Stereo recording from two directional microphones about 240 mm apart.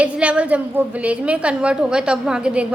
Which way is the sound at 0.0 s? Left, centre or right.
Centre.